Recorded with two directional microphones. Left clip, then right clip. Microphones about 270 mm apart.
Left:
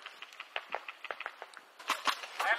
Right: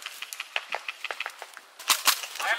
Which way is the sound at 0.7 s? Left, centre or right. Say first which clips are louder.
Right 7 dB; centre.